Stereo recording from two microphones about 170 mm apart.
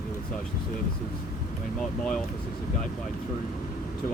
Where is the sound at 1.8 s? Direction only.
5° left (ahead or behind).